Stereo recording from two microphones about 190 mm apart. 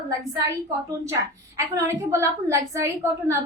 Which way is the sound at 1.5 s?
15° right (ahead or behind).